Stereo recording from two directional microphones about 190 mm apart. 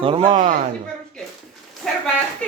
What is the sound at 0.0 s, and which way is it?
Speech, 30° right (ahead or behind).